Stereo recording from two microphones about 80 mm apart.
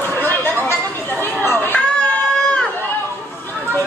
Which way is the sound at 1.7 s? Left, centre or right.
Centre.